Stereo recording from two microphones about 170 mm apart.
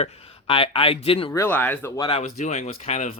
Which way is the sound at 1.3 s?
15° left (ahead or behind).